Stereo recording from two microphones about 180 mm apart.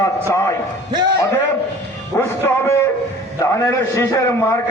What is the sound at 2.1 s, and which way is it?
A man's voice, 15° left (ahead or behind).